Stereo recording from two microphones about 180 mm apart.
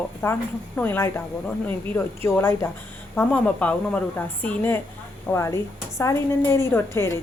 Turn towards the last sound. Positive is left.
turn(degrees=15)  # may be behind; listen again after turning